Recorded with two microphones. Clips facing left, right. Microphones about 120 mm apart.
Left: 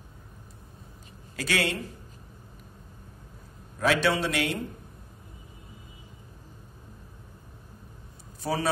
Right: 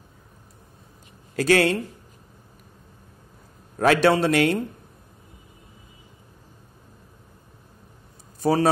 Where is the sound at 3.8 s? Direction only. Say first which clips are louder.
Right 7 dB; 50° right (ahead or behind).